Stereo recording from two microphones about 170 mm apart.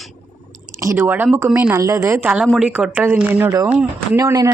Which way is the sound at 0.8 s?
15° right (ahead or behind).